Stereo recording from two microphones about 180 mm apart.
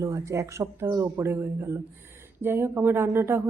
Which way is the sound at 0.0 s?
15° right (ahead or behind).